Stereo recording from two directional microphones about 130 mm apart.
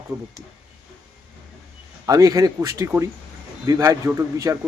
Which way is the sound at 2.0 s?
25° right (ahead or behind).